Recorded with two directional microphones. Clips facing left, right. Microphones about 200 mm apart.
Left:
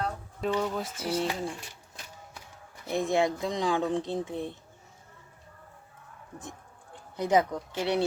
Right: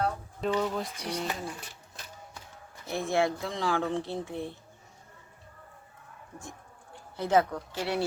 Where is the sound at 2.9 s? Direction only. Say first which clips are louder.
Left 2 dB; 15° left (ahead or behind).